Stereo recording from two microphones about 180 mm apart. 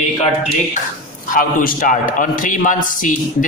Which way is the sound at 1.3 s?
50° left (ahead or behind).